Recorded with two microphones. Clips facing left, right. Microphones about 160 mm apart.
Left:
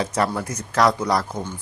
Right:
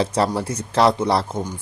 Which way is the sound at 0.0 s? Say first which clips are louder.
Right 3 dB; 30° right (ahead or behind).